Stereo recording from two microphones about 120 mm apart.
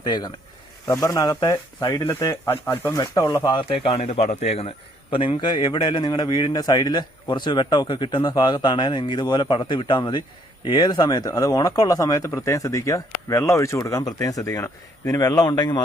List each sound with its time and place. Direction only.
0.0 s a man's voice: 35° left (ahead or behind)
0.9 s a man's voice: 25° left (ahead or behind); by 4.7 s 60° left (ahead or behind)
5.1 s a man's voice: 45° left (ahead or behind)